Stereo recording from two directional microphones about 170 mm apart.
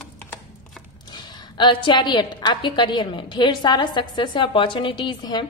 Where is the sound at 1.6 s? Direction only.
30° left (ahead or behind).